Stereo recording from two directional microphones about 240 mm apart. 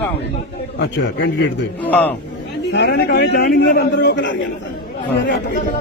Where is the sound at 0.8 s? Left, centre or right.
Left.